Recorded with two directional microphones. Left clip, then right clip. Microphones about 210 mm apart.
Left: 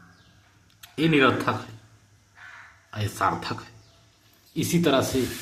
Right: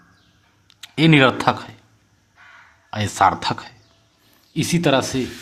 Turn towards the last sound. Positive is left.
turn(degrees=-35)  # may be behind; listen again after turning